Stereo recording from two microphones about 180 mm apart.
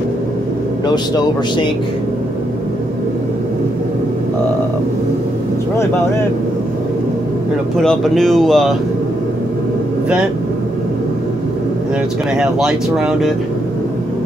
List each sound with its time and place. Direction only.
0.8 s a man's voice: 20° left (ahead or behind)
7.7 s speech: centre (ahead or behind)
12.4 s speech: 5° right (ahead or behind)